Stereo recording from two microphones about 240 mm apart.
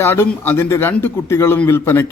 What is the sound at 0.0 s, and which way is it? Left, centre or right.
A man's voice, centre.